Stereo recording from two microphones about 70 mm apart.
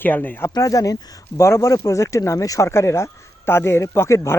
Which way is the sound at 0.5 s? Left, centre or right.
Left.